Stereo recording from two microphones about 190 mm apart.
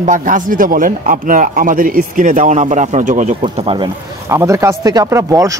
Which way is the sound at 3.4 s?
30° right (ahead or behind).